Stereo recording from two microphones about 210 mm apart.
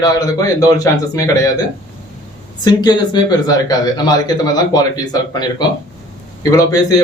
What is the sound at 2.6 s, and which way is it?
A man's voice, 20° left (ahead or behind).